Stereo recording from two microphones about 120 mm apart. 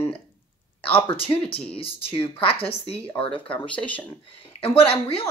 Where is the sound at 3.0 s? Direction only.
50° left (ahead or behind).